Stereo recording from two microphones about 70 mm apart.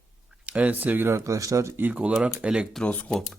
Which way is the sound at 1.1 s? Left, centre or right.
Right.